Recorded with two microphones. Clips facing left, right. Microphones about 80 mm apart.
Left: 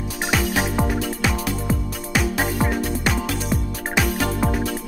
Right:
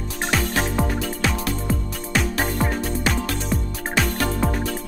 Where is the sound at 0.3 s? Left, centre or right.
Centre.